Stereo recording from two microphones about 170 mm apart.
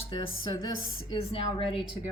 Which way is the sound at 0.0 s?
30° left (ahead or behind).